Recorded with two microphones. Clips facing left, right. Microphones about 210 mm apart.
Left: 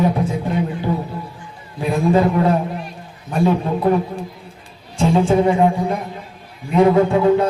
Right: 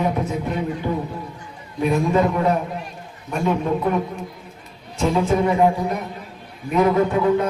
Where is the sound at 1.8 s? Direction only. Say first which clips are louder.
Left 2 dB; 30° left (ahead or behind).